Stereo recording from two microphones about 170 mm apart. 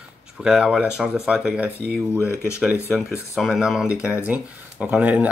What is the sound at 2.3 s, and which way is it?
Speech, 15° left (ahead or behind).